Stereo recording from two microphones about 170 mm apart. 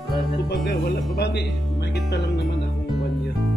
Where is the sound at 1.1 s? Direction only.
80° left.